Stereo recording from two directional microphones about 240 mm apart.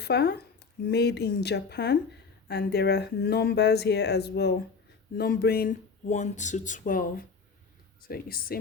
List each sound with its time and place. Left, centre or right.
0.0 s speech: left